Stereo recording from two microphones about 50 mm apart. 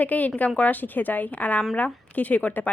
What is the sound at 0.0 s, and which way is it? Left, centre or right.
A woman's voice, left.